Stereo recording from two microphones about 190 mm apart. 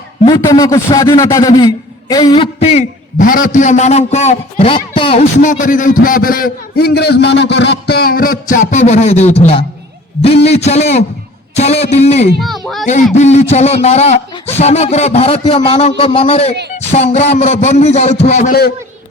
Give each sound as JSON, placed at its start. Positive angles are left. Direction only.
{"t": 0.3, "sound": "a man's voice", "side_deg": 15}
{"t": 5.4, "sound": "a man's voice", "side_deg": 40}